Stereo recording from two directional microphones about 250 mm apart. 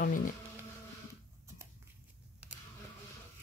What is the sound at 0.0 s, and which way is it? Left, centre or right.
Speech, left.